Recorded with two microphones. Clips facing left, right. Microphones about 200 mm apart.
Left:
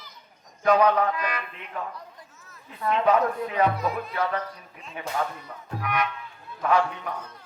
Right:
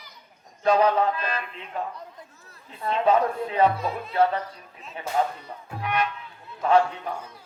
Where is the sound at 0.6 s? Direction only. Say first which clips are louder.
Even; 30° right (ahead or behind).